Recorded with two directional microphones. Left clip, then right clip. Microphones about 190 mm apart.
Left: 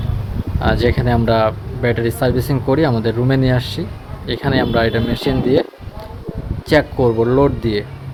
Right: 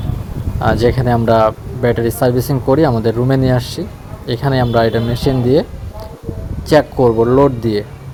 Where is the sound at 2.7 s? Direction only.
10° right (ahead or behind).